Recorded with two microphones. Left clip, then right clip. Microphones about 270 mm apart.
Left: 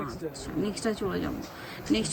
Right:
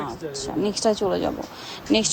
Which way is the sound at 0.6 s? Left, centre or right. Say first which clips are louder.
Right 10 dB; centre.